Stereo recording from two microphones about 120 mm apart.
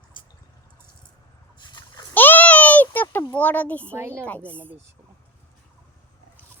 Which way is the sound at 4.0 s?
20° right (ahead or behind).